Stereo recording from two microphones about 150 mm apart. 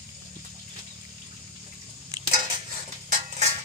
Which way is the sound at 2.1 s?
25° right (ahead or behind).